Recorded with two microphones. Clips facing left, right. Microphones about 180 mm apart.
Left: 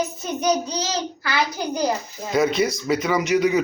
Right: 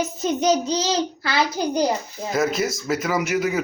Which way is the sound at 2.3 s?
Centre (ahead or behind).